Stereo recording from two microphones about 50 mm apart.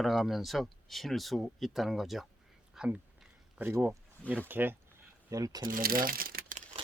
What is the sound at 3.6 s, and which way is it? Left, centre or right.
Speech, right.